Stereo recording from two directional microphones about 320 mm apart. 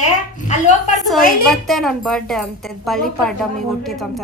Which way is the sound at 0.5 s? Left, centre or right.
Left.